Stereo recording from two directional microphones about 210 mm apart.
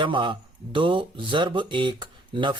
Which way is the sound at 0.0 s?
25° right (ahead or behind).